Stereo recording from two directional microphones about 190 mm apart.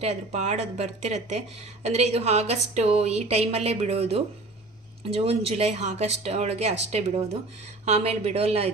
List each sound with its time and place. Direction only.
0.0 s speech: 35° right (ahead or behind)